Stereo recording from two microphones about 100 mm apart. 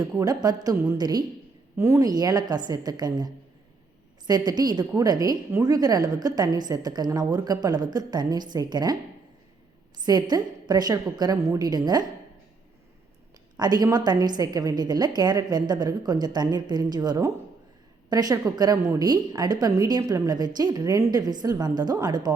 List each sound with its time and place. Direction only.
0.0 s a woman's voice: 40° right (ahead or behind)
1.7 s a woman's voice: 25° right (ahead or behind)
2.0 s a woman's voice: 40° right (ahead or behind)
5.5 s a woman's voice: 25° right (ahead or behind)
5.7 s a woman's voice: 40° right (ahead or behind)
10.0 s a woman's voice: 45° right (ahead or behind)
13.6 s a woman's voice: 40° right (ahead or behind)